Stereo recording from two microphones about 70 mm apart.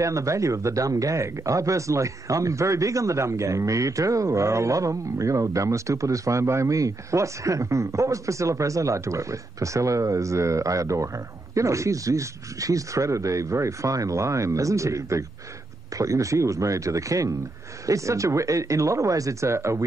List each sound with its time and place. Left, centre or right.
0.0 s speech: right